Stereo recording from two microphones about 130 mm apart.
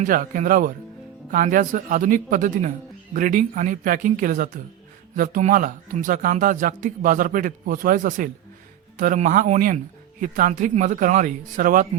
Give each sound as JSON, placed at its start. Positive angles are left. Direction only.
{"t": 0.0, "sound": "speech", "side_deg": -85}